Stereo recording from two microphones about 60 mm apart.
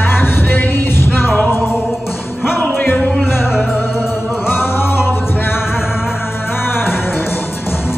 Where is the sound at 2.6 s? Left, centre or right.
Left.